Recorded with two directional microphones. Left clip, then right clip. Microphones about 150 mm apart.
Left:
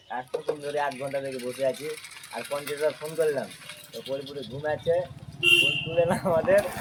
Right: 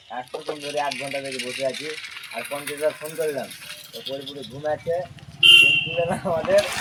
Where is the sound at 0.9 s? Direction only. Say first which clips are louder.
Right 3 dB; 80° left.